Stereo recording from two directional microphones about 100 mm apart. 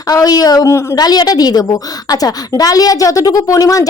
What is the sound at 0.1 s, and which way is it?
A woman's voice, 35° left (ahead or behind).